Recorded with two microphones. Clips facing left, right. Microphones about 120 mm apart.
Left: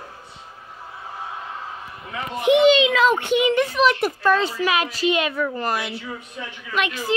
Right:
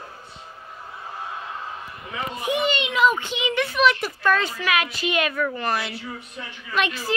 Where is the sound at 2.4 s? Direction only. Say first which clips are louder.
Left 10 dB; 90° left.